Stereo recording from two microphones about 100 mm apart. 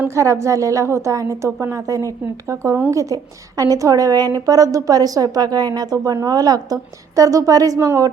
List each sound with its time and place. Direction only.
0.1 s a woman's voice: 30° right (ahead or behind)